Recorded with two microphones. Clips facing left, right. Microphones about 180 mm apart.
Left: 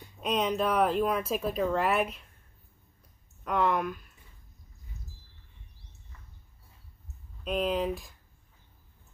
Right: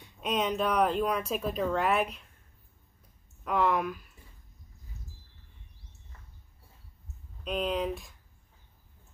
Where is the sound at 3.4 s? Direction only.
Centre (ahead or behind).